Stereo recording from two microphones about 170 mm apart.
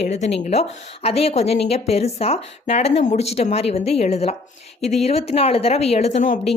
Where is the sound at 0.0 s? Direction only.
40° left (ahead or behind).